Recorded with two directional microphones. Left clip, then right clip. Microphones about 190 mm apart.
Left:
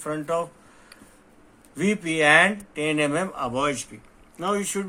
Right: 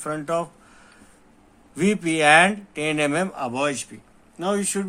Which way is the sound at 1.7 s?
45° right (ahead or behind).